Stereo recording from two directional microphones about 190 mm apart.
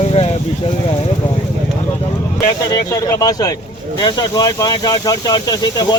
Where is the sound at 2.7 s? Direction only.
20° left (ahead or behind).